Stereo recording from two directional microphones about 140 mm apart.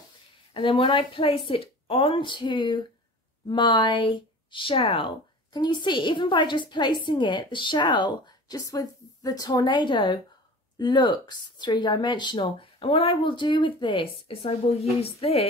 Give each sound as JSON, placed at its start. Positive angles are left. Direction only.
{"t": 0.5, "sound": "speech", "side_deg": 35}